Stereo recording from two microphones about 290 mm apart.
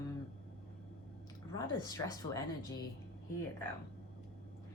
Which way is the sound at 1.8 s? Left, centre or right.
Centre.